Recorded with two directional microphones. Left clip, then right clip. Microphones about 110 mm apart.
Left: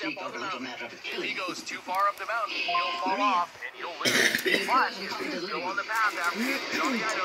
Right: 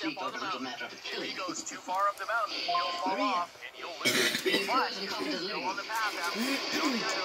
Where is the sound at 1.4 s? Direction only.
50° left (ahead or behind); by 3.5 s 35° left (ahead or behind).